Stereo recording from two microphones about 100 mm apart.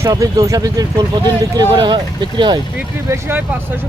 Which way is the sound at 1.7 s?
50° right (ahead or behind).